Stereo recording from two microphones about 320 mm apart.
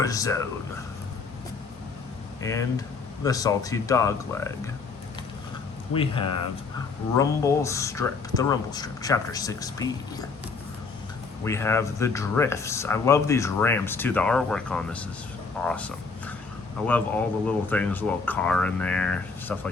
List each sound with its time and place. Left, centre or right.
0.0 s speech: centre
2.4 s speech: centre
5.9 s speech: centre
11.4 s speech: centre